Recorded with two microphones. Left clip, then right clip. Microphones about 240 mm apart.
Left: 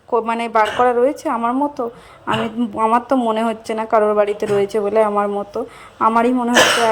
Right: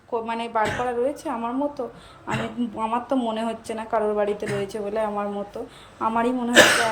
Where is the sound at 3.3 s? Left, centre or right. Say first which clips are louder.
Left 8 dB; centre.